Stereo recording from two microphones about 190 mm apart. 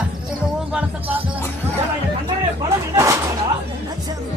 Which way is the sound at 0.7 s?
5° right (ahead or behind).